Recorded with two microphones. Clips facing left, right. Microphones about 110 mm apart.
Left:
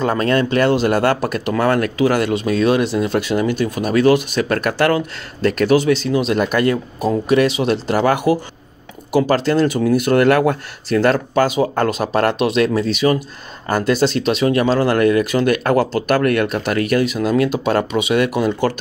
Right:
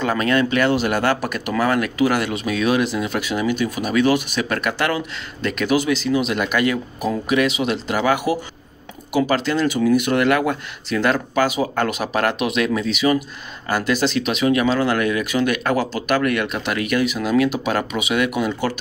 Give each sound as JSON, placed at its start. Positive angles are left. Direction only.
{"t": 0.0, "sound": "speech", "side_deg": 35}